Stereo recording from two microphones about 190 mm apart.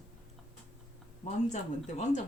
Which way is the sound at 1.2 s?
35° left (ahead or behind).